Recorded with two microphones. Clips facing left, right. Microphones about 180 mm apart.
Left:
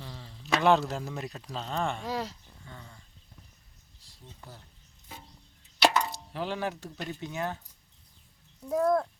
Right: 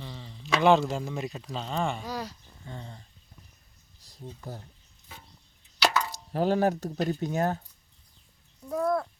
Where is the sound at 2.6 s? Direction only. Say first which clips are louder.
Right 7 dB; 30° right (ahead or behind).